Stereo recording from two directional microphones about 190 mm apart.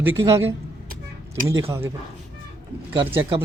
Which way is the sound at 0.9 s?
45° right (ahead or behind).